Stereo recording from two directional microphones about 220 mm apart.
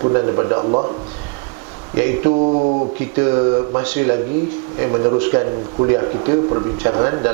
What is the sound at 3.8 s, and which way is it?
A man's voice, 15° right (ahead or behind).